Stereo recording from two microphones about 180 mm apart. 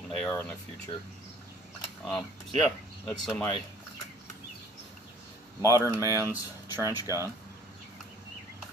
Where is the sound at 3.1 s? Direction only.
5° left (ahead or behind).